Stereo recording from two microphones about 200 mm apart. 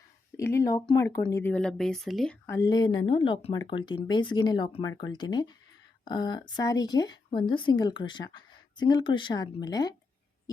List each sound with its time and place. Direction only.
0.3 s speech: 15° left (ahead or behind)
2.5 s speech: 20° left (ahead or behind)